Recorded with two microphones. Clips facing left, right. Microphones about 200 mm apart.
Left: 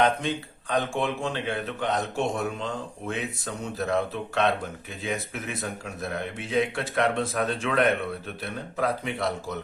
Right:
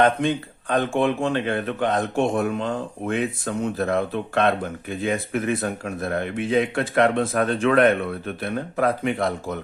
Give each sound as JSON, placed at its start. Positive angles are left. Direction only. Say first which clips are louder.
{"t": 0.7, "sound": "speech", "louder": "right 6 dB", "side_deg": -55}